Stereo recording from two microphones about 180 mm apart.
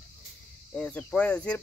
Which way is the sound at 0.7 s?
10° left (ahead or behind).